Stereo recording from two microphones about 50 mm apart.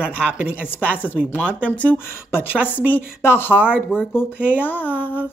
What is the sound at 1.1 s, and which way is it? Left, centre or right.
Speech, right.